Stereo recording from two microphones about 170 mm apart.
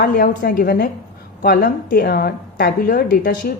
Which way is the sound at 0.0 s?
60° left (ahead or behind).